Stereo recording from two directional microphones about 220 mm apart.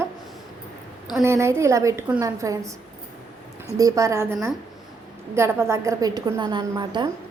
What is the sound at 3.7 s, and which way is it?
Speech, 15° right (ahead or behind).